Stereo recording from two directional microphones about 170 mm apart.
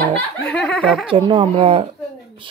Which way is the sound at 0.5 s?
5° left (ahead or behind).